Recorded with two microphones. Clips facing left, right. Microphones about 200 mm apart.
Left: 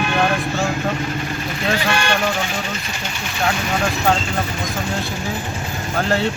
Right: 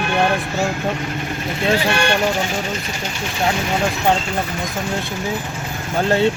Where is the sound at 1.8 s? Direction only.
55° right (ahead or behind).